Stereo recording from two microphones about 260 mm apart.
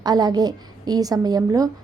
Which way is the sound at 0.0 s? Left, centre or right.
Centre.